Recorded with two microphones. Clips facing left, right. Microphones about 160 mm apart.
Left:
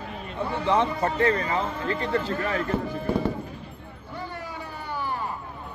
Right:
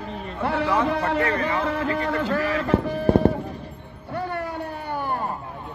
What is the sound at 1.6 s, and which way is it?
Speech, 90° right.